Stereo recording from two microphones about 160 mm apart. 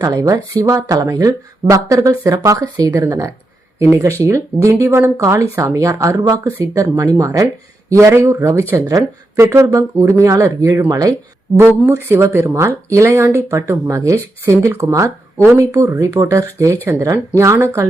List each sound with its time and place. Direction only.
0.0 s speech: 20° right (ahead or behind)